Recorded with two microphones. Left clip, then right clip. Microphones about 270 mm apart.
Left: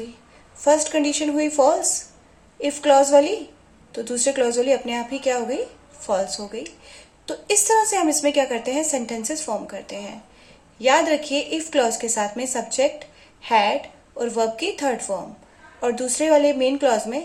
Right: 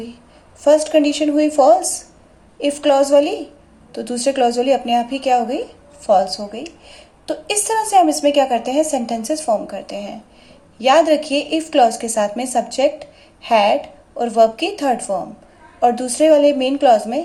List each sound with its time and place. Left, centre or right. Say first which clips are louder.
0.7 s a woman's voice: right 5 dB; right